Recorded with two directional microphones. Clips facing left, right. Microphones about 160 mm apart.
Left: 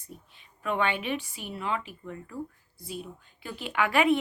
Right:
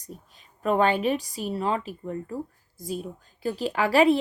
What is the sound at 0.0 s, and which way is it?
A woman's voice, 40° right (ahead or behind).